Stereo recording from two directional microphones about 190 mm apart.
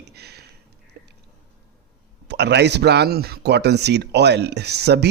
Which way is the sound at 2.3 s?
65° right (ahead or behind).